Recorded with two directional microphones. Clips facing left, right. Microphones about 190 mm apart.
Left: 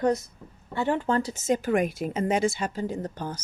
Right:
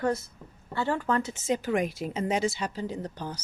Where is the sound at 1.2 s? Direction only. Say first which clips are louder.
Left 3 dB; 40° left (ahead or behind).